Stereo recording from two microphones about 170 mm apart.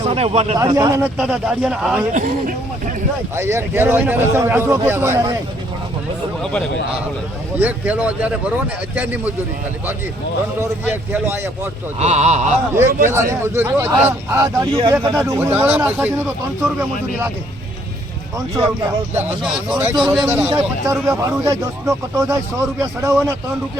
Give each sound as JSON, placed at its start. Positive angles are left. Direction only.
{"t": 0.0, "sound": "a man's voice", "side_deg": -35}
{"t": 0.6, "sound": "a man's voice", "side_deg": -20}
{"t": 1.0, "sound": "a man's voice", "side_deg": -5}
{"t": 2.1, "sound": "speech", "side_deg": -50}
{"t": 3.3, "sound": "a man's voice", "side_deg": -15}
{"t": 7.6, "sound": "a man's voice", "side_deg": -10}
{"t": 11.1, "sound": "a man's voice", "side_deg": -10}
{"t": 11.9, "sound": "speech", "side_deg": -40}
{"t": 12.7, "sound": "a man's voice", "side_deg": -15}
{"t": 14.7, "sound": "speech", "side_deg": -30}
{"t": 15.1, "sound": "a man's voice", "side_deg": -15}
{"t": 18.3, "sound": "a man's voice", "side_deg": -25}
{"t": 19.1, "sound": "a man's voice", "side_deg": -5}